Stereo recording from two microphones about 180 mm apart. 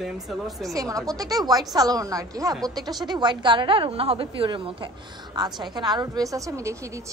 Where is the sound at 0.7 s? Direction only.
20° right (ahead or behind).